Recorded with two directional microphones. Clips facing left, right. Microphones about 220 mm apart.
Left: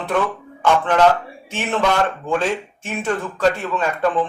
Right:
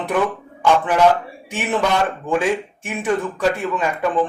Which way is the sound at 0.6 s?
10° right (ahead or behind).